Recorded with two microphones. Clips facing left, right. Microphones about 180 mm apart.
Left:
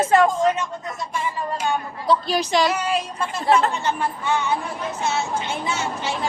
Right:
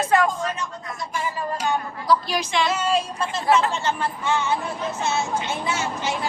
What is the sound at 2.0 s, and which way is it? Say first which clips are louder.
Speech: left 2 dB; 30° left (ahead or behind).